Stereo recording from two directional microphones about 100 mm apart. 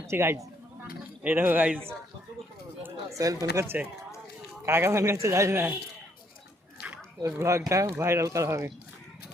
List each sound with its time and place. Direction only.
0.1 s speech: 25° right (ahead or behind)
2.8 s speech: 30° right (ahead or behind)
7.2 s speech: 30° right (ahead or behind)